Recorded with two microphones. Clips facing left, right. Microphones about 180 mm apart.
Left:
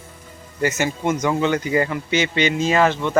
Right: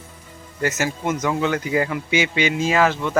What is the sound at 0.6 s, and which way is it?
Speech, centre (ahead or behind).